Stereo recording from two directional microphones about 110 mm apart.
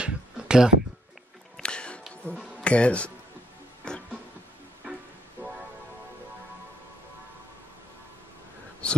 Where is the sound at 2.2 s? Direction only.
10° left (ahead or behind).